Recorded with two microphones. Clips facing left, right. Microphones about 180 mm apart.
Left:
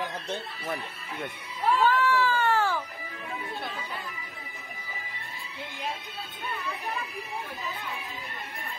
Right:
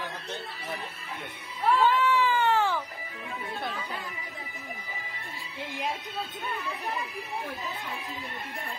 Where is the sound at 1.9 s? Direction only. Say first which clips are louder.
Even; 15° right (ahead or behind).